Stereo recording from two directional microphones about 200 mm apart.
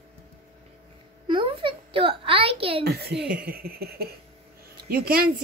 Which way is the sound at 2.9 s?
55° right (ahead or behind).